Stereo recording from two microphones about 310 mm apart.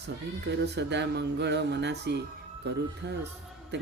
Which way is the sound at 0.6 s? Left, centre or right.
Right.